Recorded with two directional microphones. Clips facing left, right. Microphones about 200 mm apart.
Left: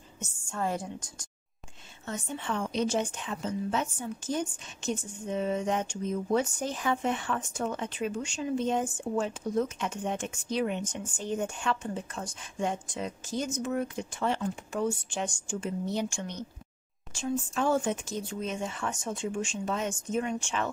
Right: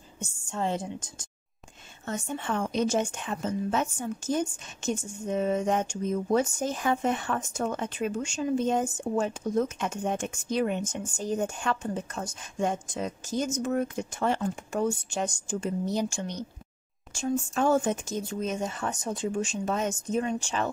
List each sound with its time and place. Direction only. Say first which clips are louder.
0.2 s a woman's voice: right 2 dB; 25° right (ahead or behind)
2.0 s a woman's voice: right 3 dB; 50° right (ahead or behind)